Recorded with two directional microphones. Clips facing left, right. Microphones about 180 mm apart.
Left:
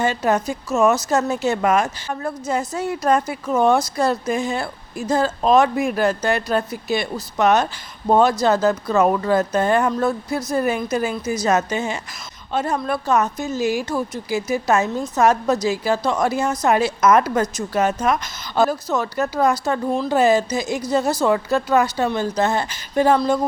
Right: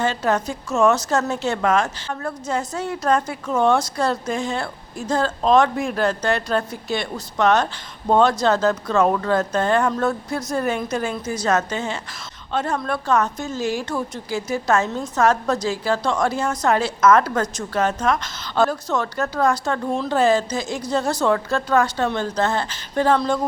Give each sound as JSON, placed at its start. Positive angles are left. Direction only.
{"t": 0.0, "sound": "speech", "side_deg": 10}